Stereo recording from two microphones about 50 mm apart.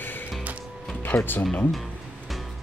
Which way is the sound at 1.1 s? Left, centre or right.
Left.